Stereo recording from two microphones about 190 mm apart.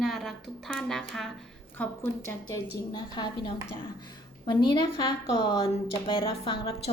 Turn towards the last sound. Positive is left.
turn(degrees=30)  # may be behind; listen again after turning